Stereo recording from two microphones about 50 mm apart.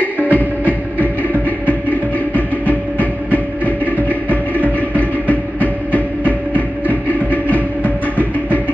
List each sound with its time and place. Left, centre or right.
0.0 s music: left